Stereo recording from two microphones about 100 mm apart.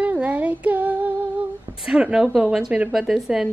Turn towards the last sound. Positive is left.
turn(degrees=-5)  # may be behind; listen again after turning